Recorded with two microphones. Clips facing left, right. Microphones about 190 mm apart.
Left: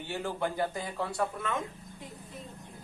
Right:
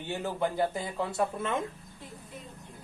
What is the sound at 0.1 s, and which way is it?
Speech, 20° right (ahead or behind).